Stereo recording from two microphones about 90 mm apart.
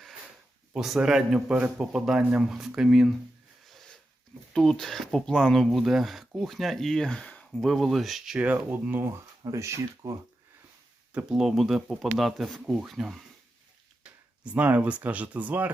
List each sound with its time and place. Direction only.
0.7 s speech: 5° right (ahead or behind)
3.7 s a sound: centre (ahead or behind)
4.5 s speech: 5° left (ahead or behind)
8.4 s speech: 15° right (ahead or behind)
9.5 s speech: 35° right (ahead or behind)
11.1 s speech: 10° right (ahead or behind)
14.0 s speech: 15° right (ahead or behind)